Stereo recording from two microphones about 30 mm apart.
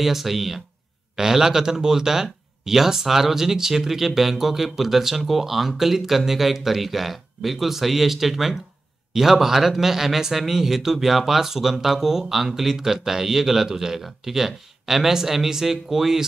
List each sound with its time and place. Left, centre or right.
0.0 s a man's voice: centre
1.1 s a man's voice: centre